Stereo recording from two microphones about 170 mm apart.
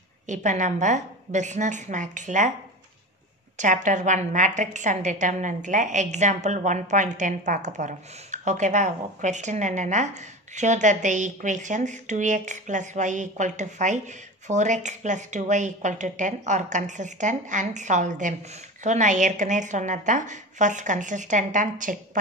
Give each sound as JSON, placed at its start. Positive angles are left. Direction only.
{"t": 0.3, "sound": "a woman's voice", "side_deg": -45}
{"t": 3.5, "sound": "a woman's voice", "side_deg": -50}